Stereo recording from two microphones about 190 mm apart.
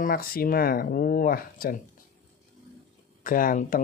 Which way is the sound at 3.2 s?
45° left (ahead or behind).